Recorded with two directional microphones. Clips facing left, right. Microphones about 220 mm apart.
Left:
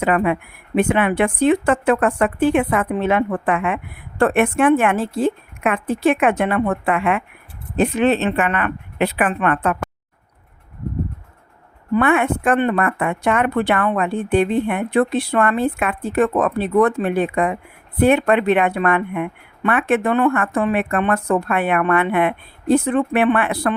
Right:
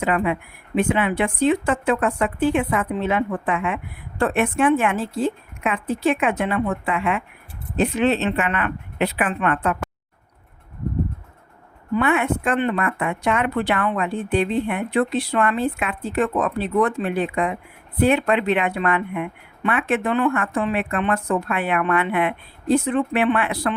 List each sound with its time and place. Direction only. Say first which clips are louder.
0.0 s a woman's voice: left 3 dB; 55° left (ahead or behind)
6.1 s a woman's voice: left 4 dB; 55° left (ahead or behind)
11.9 s speech: left 3 dB; 50° left (ahead or behind)